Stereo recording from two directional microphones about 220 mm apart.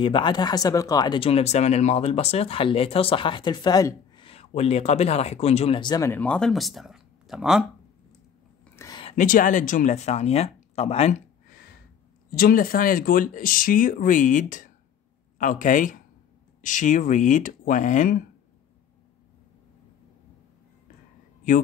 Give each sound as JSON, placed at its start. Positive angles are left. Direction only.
{"t": 0.0, "sound": "speech", "side_deg": 20}
{"t": 8.7, "sound": "a sound", "side_deg": 20}
{"t": 9.1, "sound": "speech", "side_deg": 35}
{"t": 12.3, "sound": "speech", "side_deg": 40}
{"t": 21.4, "sound": "speech", "side_deg": 35}